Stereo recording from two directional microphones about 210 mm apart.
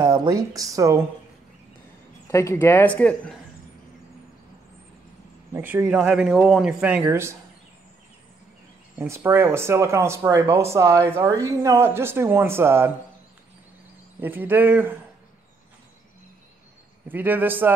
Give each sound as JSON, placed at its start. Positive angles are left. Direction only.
{"t": 0.0, "sound": "speech", "side_deg": -15}
{"t": 2.2, "sound": "speech", "side_deg": 15}
{"t": 5.5, "sound": "a man's voice", "side_deg": -10}
{"t": 8.9, "sound": "speech", "side_deg": -15}
{"t": 14.2, "sound": "speech", "side_deg": -10}
{"t": 17.1, "sound": "speech", "side_deg": -10}